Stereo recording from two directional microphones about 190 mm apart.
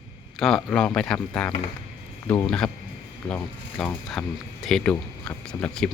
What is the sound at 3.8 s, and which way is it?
Speech, centre (ahead or behind).